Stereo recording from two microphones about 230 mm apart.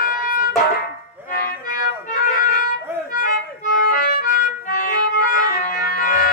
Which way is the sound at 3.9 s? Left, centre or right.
Left.